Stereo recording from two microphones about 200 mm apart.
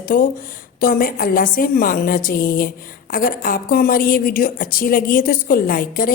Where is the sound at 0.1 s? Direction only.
45° left (ahead or behind).